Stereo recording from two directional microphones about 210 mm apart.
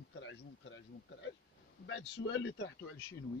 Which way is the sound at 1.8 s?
60° left (ahead or behind).